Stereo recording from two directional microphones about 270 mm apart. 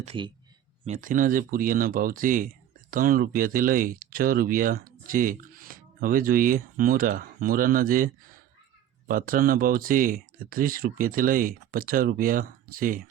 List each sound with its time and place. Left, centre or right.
0.0 s speech: centre